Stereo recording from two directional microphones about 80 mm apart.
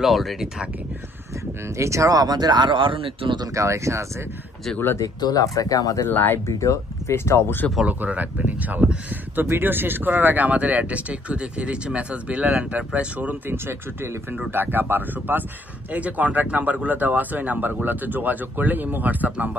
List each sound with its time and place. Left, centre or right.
0.0 s speech: centre
1.8 s speech: right
3.5 s speech: right
5.2 s speech: left
6.0 s speech: left
6.4 s speech: left
7.8 s speech: centre
13.5 s speech: right